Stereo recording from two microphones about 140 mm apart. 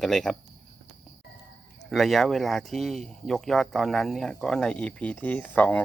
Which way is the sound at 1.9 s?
Centre (ahead or behind).